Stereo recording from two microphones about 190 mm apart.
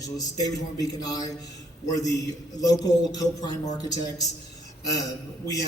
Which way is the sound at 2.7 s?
20° left (ahead or behind).